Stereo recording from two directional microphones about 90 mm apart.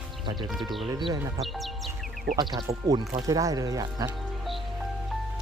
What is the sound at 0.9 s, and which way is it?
Speech, 60° right (ahead or behind).